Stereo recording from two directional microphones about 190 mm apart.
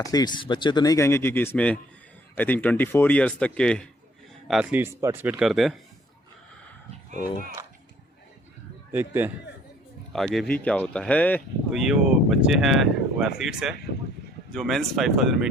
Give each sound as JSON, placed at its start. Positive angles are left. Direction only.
{"t": 0.0, "sound": "speech", "side_deg": 20}
{"t": 8.9, "sound": "speech", "side_deg": -10}
{"t": 10.1, "sound": "speech", "side_deg": 0}
{"t": 11.7, "sound": "speech", "side_deg": 0}